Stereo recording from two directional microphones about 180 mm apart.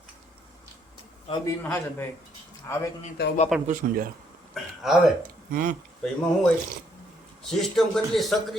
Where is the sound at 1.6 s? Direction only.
15° left (ahead or behind).